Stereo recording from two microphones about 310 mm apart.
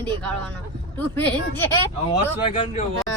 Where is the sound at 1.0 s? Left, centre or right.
Centre.